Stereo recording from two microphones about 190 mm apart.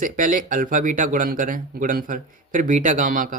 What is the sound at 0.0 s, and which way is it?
Speech, 45° right (ahead or behind).